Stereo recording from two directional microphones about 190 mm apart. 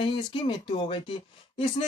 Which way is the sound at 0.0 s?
25° left (ahead or behind).